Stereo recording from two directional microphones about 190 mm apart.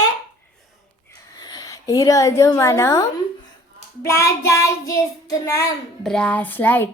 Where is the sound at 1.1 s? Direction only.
20° left (ahead or behind).